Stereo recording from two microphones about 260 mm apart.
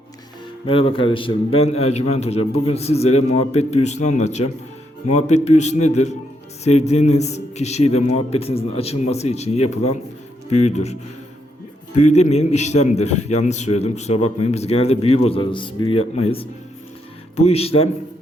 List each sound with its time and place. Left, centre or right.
0.6 s a man's voice: left
11.9 s a man's voice: left